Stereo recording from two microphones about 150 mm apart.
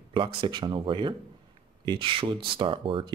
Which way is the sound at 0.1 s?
35° right (ahead or behind).